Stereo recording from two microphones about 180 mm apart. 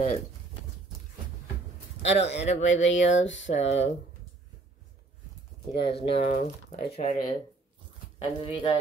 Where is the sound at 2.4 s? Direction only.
40° left (ahead or behind).